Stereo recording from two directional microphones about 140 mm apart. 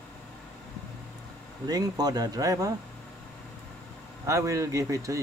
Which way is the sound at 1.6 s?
30° right (ahead or behind).